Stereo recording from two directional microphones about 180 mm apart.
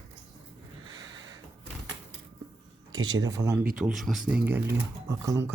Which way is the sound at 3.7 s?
Centre (ahead or behind).